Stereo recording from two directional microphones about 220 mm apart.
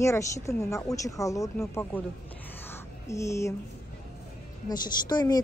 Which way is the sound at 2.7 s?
15° left (ahead or behind).